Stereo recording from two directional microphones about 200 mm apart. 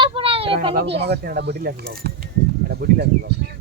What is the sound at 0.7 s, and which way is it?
Speech, 60° right (ahead or behind).